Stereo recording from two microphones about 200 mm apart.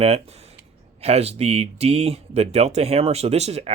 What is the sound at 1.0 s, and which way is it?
Speech, 30° right (ahead or behind).